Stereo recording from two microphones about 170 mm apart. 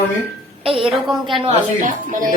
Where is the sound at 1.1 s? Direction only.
Centre (ahead or behind).